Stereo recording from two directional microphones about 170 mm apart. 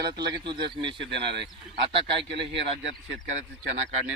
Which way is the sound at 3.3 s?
45° right (ahead or behind).